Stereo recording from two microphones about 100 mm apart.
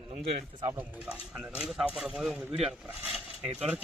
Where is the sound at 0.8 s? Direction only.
10° right (ahead or behind).